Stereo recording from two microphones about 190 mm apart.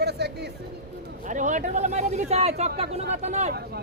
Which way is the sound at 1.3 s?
40° right (ahead or behind).